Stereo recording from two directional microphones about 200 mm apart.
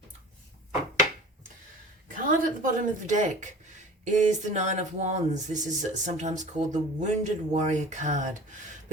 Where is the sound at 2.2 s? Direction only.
40° right (ahead or behind).